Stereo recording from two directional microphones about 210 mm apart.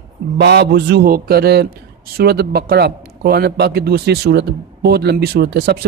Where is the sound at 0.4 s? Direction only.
50° right (ahead or behind).